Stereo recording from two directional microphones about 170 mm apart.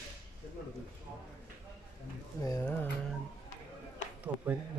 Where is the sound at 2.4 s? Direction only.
20° left (ahead or behind).